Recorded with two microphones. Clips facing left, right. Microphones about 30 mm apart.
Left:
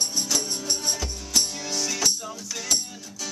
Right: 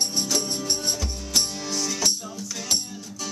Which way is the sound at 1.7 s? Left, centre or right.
Centre.